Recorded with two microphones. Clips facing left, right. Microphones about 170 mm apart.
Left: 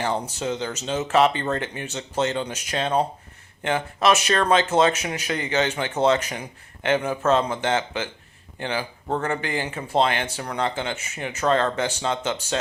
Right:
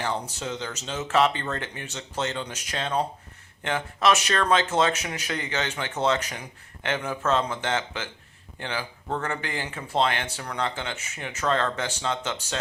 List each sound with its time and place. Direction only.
0.0 s speech: 20° left (ahead or behind)